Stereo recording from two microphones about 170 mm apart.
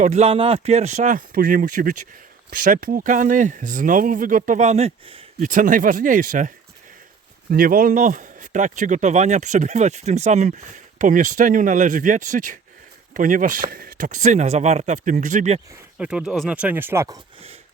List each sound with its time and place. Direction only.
0.0 s speech: 40° right (ahead or behind)
5.4 s speech: 50° right (ahead or behind)
7.5 s speech: 55° right (ahead or behind)
15.7 s speech: 5° right (ahead or behind)